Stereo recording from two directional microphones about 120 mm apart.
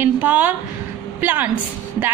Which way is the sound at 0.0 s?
15° right (ahead or behind).